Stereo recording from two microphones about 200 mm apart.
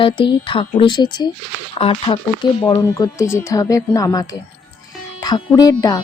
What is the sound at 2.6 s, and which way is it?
Speech, 15° left (ahead or behind).